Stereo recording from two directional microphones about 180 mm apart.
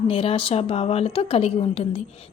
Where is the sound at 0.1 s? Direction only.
30° left (ahead or behind).